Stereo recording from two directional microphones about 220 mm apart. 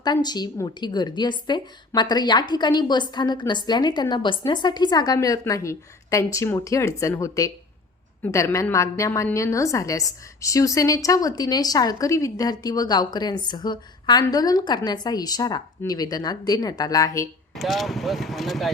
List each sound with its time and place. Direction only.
0.0 s a woman's voice: 20° left (ahead or behind)
17.5 s speech: centre (ahead or behind)